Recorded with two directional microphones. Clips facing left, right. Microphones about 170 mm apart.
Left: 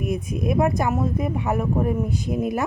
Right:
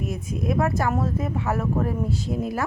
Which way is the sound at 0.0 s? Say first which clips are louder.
Left 3 dB; 15° left (ahead or behind).